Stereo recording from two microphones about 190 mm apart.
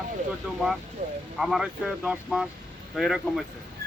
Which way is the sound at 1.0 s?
45° right (ahead or behind).